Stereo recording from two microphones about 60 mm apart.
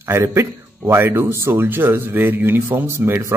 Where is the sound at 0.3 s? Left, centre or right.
Right.